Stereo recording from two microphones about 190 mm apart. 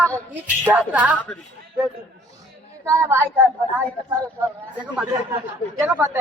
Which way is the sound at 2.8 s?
15° right (ahead or behind).